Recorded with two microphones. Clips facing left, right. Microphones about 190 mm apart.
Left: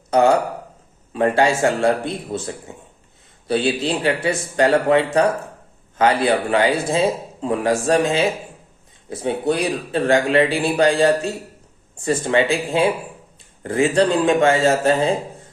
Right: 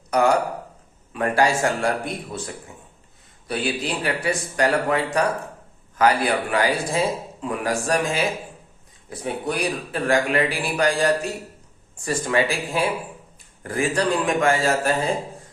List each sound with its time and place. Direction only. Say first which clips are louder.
0.1 s a man's voice: left 4 dB; 25° left (ahead or behind)
3.4 s a man's voice: left 6 dB; 30° left (ahead or behind)